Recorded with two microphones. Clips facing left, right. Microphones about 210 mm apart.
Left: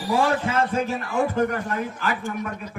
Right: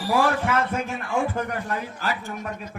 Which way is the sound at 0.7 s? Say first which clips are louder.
Left 2 dB; 35° left (ahead or behind).